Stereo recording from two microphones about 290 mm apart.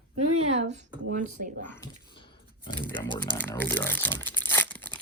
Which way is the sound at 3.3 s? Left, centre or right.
Centre.